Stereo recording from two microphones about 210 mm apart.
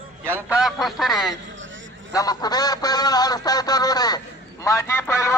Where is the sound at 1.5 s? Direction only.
60° right (ahead or behind).